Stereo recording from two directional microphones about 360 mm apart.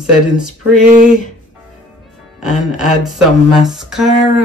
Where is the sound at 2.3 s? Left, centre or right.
Centre.